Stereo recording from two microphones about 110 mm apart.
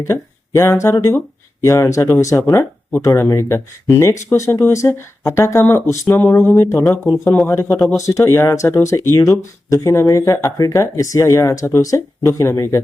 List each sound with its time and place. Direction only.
0.1 s speech: 25° left (ahead or behind)